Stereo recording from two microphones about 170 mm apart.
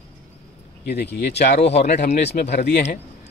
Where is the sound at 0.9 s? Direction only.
75° left (ahead or behind).